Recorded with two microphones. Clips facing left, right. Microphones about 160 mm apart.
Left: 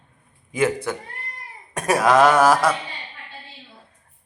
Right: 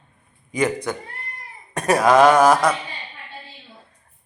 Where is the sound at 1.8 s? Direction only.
5° left (ahead or behind).